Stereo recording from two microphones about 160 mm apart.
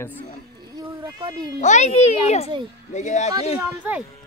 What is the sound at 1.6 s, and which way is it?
A child's voice, 45° left (ahead or behind).